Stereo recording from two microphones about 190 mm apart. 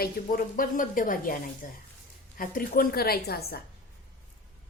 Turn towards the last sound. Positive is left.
turn(degrees=55)  # may be behind; listen again after turning